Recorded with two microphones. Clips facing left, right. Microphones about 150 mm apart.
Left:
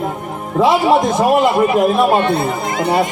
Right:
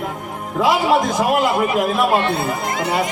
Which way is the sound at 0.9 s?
25° left (ahead or behind).